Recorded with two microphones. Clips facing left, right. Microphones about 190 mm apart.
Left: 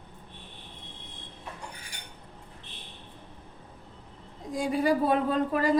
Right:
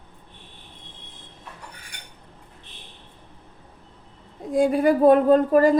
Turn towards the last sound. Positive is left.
turn(degrees=-45)  # may be behind; listen again after turning